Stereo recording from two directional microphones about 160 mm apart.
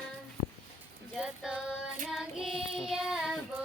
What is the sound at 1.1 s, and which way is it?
Child singing, 5° right (ahead or behind).